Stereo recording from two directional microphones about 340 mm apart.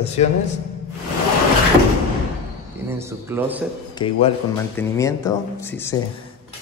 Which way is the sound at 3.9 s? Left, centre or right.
Centre.